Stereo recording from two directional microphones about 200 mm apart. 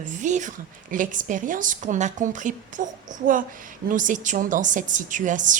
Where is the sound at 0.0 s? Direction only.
40° right (ahead or behind).